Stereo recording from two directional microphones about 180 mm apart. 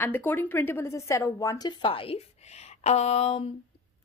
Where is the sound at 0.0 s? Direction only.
10° left (ahead or behind); by 3.5 s 35° left (ahead or behind).